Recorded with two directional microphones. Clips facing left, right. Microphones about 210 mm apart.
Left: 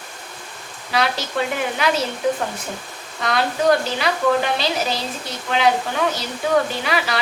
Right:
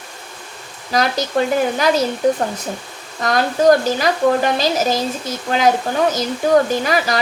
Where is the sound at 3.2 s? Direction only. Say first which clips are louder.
Right 4 dB; 45° right (ahead or behind).